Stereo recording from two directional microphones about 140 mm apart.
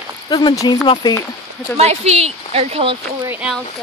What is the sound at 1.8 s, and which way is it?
Speech, 50° right (ahead or behind).